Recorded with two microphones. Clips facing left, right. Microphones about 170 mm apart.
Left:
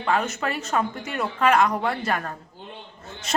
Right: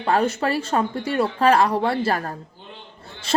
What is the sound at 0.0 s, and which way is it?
Speech, 35° right (ahead or behind).